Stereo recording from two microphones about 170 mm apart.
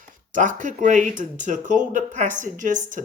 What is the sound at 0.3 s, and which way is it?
Speech, 50° right (ahead or behind).